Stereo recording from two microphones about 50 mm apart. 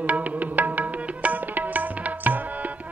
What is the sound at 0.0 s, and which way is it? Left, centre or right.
Music, right.